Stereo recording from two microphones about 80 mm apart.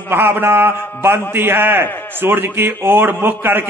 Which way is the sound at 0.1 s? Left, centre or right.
Right.